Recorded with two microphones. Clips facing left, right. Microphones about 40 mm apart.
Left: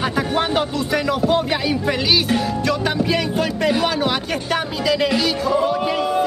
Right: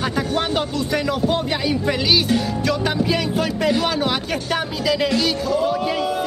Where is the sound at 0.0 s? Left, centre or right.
Centre.